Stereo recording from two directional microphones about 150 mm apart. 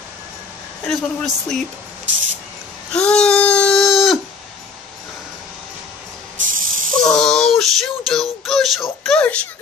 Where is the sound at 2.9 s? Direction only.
5° left (ahead or behind).